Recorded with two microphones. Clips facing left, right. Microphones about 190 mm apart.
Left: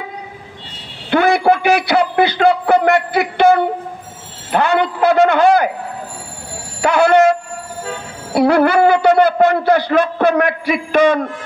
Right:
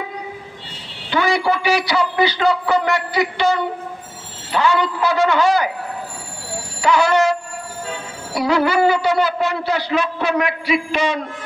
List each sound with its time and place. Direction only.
1.1 s a man's voice: 55° left (ahead or behind)
6.8 s a man's voice: 55° left (ahead or behind)